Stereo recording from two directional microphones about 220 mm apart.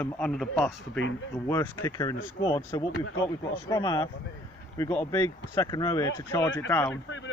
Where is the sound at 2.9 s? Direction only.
65° left (ahead or behind).